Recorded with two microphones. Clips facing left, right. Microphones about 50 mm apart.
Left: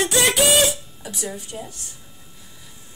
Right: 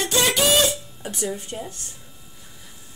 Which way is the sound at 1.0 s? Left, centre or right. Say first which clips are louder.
Right 5 dB; right.